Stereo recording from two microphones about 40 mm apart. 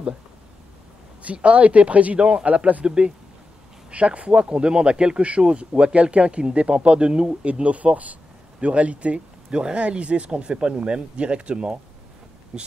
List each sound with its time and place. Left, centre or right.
1.2 s speech: right
2.1 s speech: right
2.4 s speech: right
7.6 s speech: right